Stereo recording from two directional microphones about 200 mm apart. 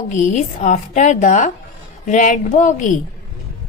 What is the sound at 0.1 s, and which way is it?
Speech, 35° left (ahead or behind).